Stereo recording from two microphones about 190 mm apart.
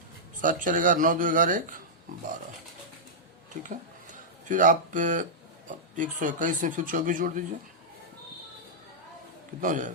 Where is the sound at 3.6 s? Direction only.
45° right (ahead or behind).